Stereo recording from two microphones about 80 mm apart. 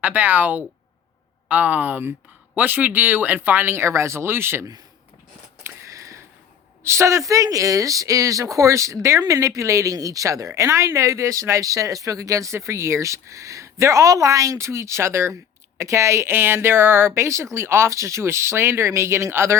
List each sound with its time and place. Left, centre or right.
0.0 s speech: centre
5.6 s a sound: right
6.8 s speech: right